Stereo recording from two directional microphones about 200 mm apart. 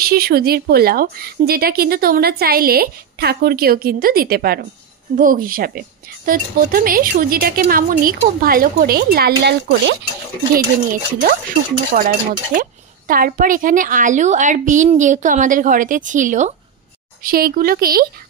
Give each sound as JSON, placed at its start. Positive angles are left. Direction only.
{"t": 0.0, "sound": "a woman's voice", "side_deg": -50}
{"t": 10.5, "sound": "a woman's voice", "side_deg": -45}